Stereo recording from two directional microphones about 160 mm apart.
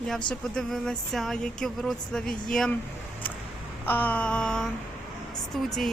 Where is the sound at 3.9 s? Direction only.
10° left (ahead or behind).